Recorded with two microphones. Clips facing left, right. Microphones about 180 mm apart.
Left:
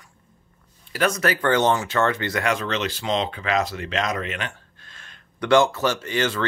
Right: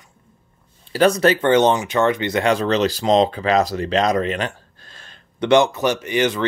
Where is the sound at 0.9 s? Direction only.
30° right (ahead or behind).